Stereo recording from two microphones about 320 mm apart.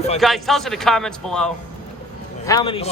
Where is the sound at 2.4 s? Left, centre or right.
Centre.